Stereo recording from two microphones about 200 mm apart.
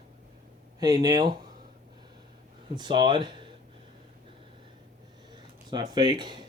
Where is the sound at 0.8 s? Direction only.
20° right (ahead or behind).